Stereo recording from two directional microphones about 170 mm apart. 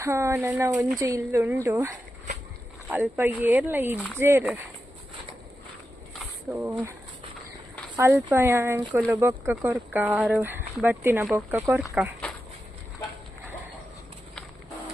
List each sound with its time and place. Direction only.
0.0 s speech: 15° right (ahead or behind)
2.9 s speech: 10° right (ahead or behind)
6.5 s speech: 10° right (ahead or behind)
7.9 s speech: 15° right (ahead or behind)